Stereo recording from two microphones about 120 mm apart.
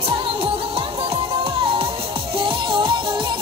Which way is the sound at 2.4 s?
45° right (ahead or behind).